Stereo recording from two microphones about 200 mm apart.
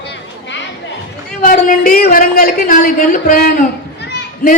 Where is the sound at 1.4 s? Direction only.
40° left (ahead or behind).